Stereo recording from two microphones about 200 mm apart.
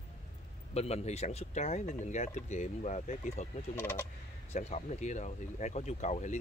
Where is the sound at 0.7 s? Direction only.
30° left (ahead or behind).